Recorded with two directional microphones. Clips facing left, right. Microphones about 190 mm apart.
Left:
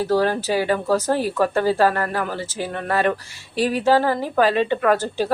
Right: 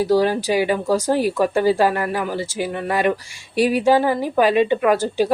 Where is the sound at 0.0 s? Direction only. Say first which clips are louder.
Right 2 dB; 10° right (ahead or behind).